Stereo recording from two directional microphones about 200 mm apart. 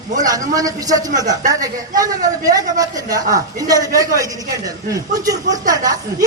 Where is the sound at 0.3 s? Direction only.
20° right (ahead or behind).